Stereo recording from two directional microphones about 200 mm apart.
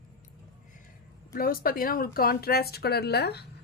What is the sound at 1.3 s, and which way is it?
A woman's voice, 45° left (ahead or behind).